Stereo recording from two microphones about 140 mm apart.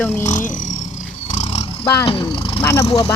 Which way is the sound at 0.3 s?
65° left (ahead or behind).